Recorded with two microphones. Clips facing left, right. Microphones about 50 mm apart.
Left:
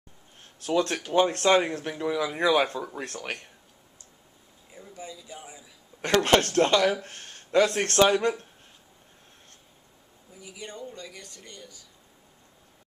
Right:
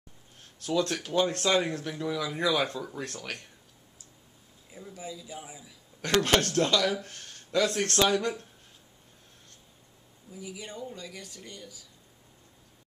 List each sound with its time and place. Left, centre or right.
0.7 s speech: left
4.6 s speech: centre
5.9 s speech: left
10.3 s speech: centre